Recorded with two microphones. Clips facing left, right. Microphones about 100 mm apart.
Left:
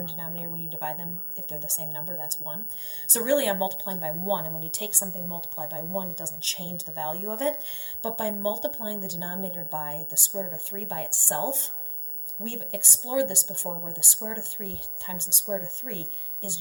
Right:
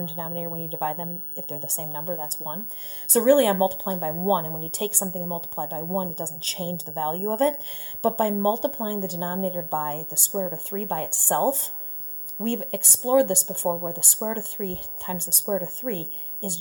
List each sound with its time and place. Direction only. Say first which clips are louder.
0.0 s speech: right 7 dB; 45° right (ahead or behind)